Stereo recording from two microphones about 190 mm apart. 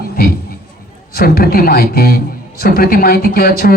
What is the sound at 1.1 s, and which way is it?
A man's voice, 55° left (ahead or behind).